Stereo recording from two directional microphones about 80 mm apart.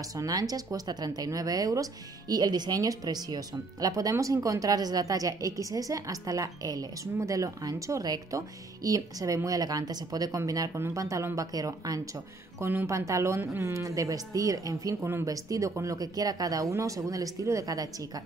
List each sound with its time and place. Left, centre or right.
0.1 s speech: right
7.2 s speech: right
10.7 s speech: right
12.5 s speech: right
13.8 s speech: right